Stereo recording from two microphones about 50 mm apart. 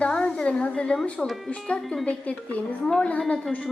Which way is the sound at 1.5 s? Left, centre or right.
Left.